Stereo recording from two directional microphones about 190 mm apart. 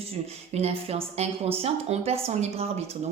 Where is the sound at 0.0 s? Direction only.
30° right (ahead or behind).